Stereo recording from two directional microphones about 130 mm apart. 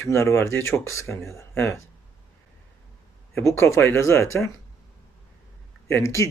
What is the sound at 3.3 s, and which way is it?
Speech, 20° left (ahead or behind).